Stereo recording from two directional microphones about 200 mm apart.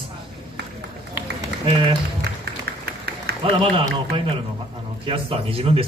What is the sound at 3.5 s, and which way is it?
Speech, 25° right (ahead or behind).